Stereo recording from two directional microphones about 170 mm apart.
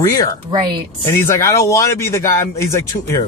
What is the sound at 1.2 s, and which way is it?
Speech, 15° left (ahead or behind).